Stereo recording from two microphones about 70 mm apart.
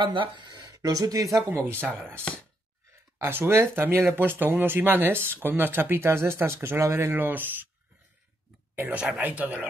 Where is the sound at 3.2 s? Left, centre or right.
Right.